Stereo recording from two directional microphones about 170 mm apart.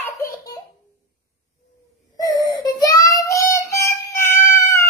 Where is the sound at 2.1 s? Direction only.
20° left (ahead or behind).